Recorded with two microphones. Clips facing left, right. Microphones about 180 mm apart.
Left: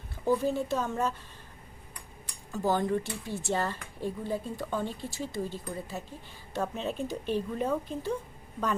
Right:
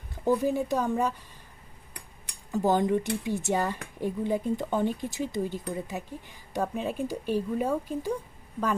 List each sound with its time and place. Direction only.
0.3 s speech: 15° right (ahead or behind)
2.5 s speech: 20° right (ahead or behind)